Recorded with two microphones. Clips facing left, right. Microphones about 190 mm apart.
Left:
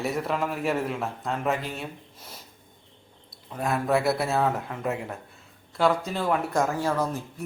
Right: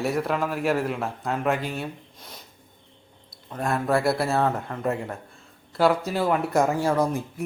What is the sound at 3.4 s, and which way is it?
Speech, centre (ahead or behind).